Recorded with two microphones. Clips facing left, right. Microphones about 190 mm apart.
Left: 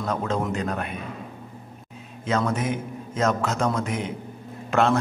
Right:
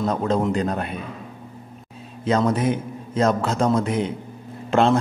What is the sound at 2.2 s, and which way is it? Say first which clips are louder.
A man's voice: right 5 dB; 35° right (ahead or behind).